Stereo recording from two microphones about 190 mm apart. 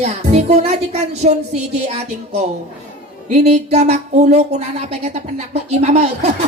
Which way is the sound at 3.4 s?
35° right (ahead or behind).